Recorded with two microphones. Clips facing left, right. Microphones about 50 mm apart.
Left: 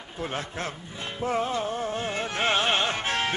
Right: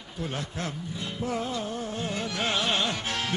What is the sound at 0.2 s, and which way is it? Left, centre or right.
Speech, left.